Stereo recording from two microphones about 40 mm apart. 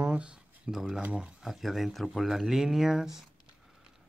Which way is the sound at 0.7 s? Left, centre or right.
Centre.